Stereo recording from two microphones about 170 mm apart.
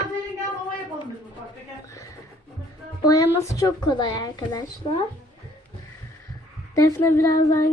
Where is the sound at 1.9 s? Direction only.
20° left (ahead or behind).